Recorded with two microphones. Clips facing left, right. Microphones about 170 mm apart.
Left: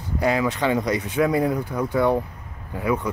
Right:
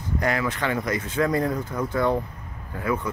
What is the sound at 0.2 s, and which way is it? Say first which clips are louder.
Speech: left 5 dB; 15° left (ahead or behind).